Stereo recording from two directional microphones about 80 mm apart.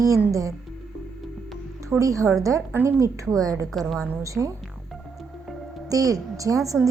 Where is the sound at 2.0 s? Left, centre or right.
Right.